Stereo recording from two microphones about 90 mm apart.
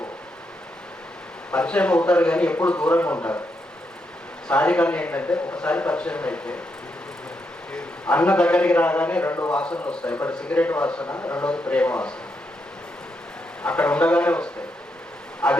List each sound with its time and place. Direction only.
1.5 s a man's voice: 10° left (ahead or behind)
4.4 s a man's voice: 15° left (ahead or behind)
7.7 s a man's voice: 10° left (ahead or behind)
11.1 s a man's voice: 30° left (ahead or behind)
11.3 s a man's voice: 15° left (ahead or behind)
13.6 s a man's voice: 15° left (ahead or behind)